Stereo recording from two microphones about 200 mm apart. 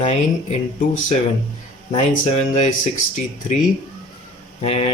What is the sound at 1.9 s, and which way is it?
Speech, 35° left (ahead or behind).